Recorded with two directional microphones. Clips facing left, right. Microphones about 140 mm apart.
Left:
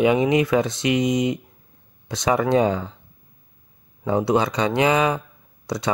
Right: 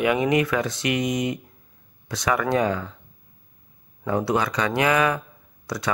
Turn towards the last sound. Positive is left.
turn(degrees=20)  # may be behind; listen again after turning